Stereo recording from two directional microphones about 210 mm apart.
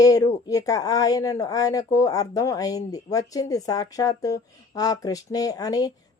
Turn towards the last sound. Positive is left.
turn(degrees=20)  # may be behind; listen again after turning